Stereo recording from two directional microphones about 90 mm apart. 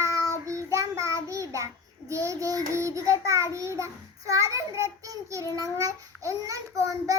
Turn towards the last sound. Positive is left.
turn(degrees=-35)  # may be behind; listen again after turning